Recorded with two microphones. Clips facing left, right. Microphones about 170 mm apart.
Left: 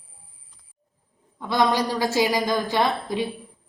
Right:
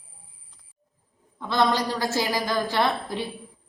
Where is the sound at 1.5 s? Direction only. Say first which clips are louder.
Left 2 dB; 15° left (ahead or behind).